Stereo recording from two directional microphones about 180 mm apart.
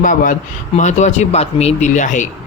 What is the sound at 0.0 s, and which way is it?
Speech, 45° left (ahead or behind).